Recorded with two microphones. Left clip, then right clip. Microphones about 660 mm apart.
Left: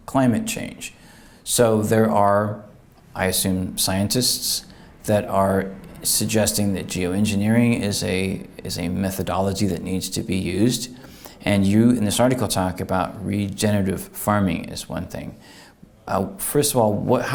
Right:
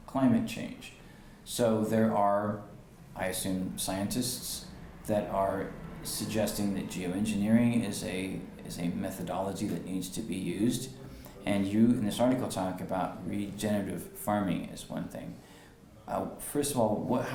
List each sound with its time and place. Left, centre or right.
0.0 s speech: left